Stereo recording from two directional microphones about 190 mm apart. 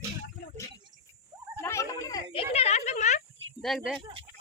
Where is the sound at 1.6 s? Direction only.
15° left (ahead or behind).